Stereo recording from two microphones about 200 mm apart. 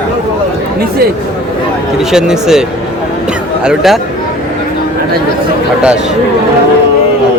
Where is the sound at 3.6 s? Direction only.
Centre (ahead or behind).